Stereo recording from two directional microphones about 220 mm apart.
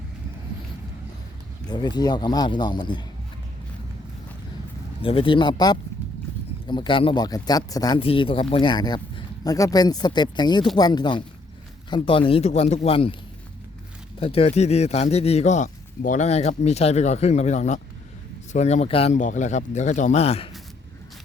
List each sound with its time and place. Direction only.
1.7 s speech: 20° left (ahead or behind)
5.0 s speech: 25° left (ahead or behind)
14.2 s a man's voice: 25° left (ahead or behind)